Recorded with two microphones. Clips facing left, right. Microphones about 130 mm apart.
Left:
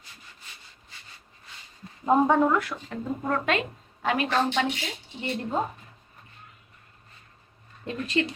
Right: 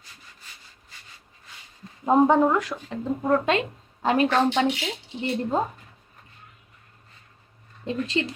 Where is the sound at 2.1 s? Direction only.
20° right (ahead or behind).